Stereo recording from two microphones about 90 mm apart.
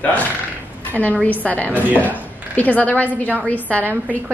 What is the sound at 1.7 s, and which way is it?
Speech, 20° right (ahead or behind).